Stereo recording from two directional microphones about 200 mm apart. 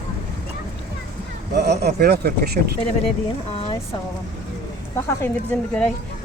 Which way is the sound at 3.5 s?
30° left (ahead or behind).